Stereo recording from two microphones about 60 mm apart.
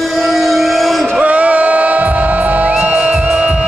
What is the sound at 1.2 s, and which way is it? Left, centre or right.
Music, right.